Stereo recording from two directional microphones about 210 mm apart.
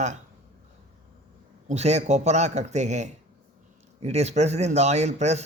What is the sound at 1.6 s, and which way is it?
Speech, 30° right (ahead or behind).